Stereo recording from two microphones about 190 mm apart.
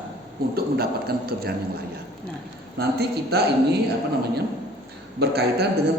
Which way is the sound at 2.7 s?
60° right (ahead or behind).